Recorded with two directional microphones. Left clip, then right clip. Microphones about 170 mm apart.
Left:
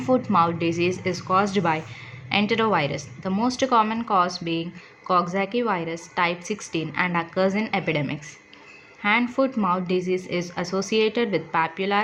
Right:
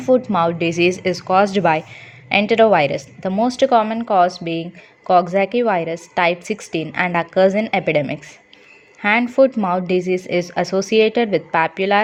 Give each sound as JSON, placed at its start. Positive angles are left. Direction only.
{"t": 0.0, "sound": "speech", "side_deg": -30}
{"t": 9.2, "sound": "speech", "side_deg": -35}